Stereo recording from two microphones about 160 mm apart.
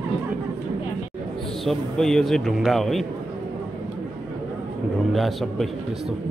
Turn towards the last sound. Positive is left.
turn(degrees=0)  # may be behind; listen again after turning